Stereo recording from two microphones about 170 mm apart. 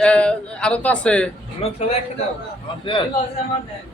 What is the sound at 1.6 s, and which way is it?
A man's voice, 35° left (ahead or behind).